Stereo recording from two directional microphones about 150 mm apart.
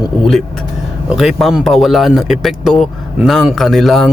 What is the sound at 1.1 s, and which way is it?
Speech, 5° right (ahead or behind).